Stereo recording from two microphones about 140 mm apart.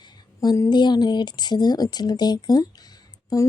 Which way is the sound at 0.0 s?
30° left (ahead or behind).